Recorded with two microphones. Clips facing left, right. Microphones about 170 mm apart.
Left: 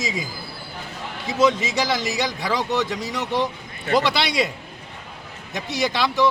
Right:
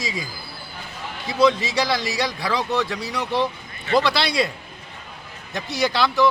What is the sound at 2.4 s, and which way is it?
Speech, 20° left (ahead or behind).